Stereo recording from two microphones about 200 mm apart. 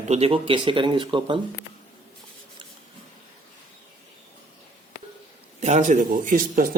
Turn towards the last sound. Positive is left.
turn(degrees=-45)  # may be behind; listen again after turning